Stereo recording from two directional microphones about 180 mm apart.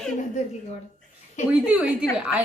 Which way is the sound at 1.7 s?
5° right (ahead or behind).